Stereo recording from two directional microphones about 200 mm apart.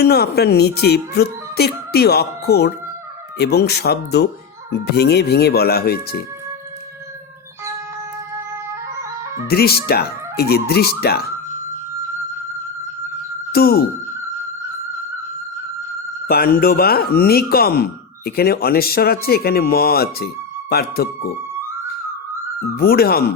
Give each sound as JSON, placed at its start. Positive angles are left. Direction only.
{"t": 0.0, "sound": "speech", "side_deg": 55}
{"t": 9.5, "sound": "speech", "side_deg": 50}
{"t": 13.5, "sound": "speech", "side_deg": 50}
{"t": 16.3, "sound": "speech", "side_deg": 50}
{"t": 22.8, "sound": "speech", "side_deg": 50}